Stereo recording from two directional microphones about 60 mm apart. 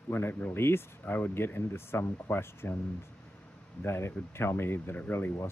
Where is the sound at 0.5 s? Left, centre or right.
Left.